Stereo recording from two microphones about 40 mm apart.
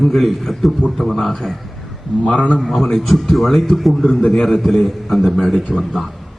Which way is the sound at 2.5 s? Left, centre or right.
Centre.